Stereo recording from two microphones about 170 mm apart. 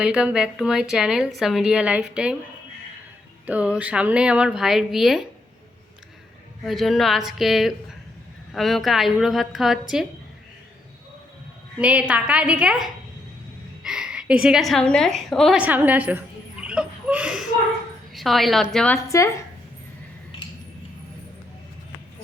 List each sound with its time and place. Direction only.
0.0 s a woman's voice: 5° right (ahead or behind)
3.4 s speech: 10° right (ahead or behind)
6.7 s a woman's voice: centre (ahead or behind)
11.8 s a woman's voice: 5° right (ahead or behind)
19.0 s speech: 20° left (ahead or behind)